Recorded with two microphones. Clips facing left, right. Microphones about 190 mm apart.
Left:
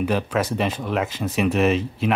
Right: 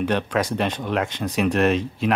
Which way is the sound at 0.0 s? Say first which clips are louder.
Even; 5° left (ahead or behind).